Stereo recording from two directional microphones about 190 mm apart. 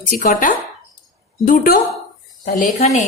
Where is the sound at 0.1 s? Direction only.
50° left (ahead or behind).